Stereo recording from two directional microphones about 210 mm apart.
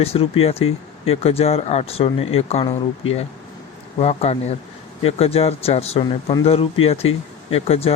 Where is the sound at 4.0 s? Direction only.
30° left (ahead or behind).